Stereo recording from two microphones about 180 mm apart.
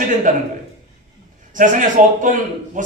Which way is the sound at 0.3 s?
45° right (ahead or behind).